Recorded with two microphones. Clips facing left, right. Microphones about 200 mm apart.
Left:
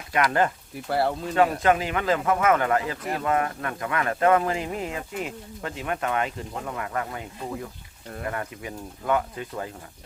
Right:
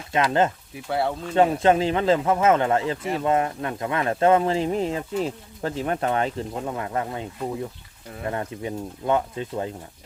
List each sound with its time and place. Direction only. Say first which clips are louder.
0.1 s speech: right 2 dB; 25° right (ahead or behind)
0.9 s speech: even; centre (ahead or behind)
1.4 s speech: right 3 dB; 30° right (ahead or behind)
8.3 s speech: right 6 dB; 25° right (ahead or behind)